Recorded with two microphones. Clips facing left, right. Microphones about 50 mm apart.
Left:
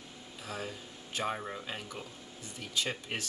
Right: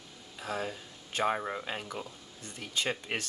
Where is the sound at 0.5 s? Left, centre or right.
Centre.